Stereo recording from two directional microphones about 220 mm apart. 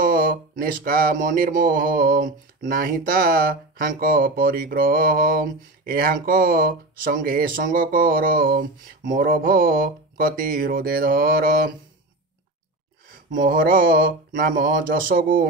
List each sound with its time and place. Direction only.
0.0 s speech: 40° right (ahead or behind)
13.3 s speech: 40° right (ahead or behind)